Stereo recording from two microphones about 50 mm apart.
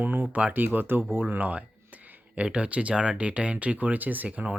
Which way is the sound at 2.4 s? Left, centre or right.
Right.